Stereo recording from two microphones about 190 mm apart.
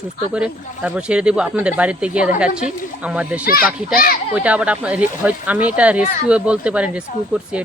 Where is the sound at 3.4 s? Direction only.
50° left (ahead or behind).